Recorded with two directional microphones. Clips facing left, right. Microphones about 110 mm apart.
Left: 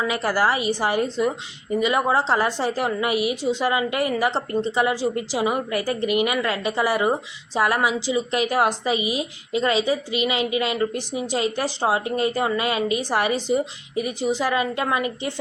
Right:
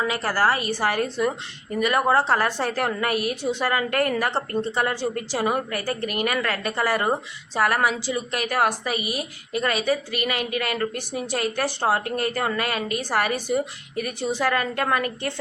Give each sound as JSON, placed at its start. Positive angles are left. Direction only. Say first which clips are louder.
{"t": 0.1, "sound": "speech", "louder": "left 1 dB", "side_deg": 15}